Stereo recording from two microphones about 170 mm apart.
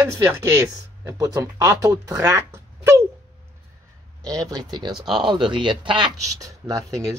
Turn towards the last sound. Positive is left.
turn(degrees=-20)  # may be behind; listen again after turning